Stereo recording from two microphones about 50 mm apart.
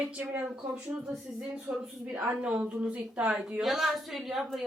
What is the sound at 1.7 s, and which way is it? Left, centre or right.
Speech, right.